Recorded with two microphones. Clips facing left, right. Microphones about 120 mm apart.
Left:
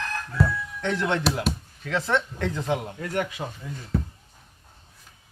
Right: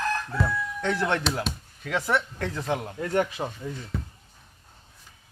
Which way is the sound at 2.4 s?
15° left (ahead or behind).